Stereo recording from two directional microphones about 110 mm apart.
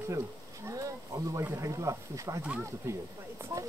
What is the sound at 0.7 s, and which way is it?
Speech, 30° right (ahead or behind).